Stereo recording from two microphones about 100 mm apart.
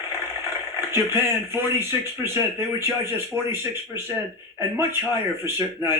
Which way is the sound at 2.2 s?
25° right (ahead or behind).